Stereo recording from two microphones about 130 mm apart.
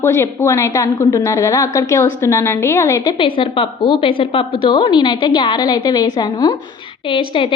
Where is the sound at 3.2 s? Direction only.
40° left (ahead or behind).